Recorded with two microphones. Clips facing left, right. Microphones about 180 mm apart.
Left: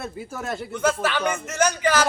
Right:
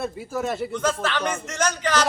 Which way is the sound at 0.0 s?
Centre (ahead or behind).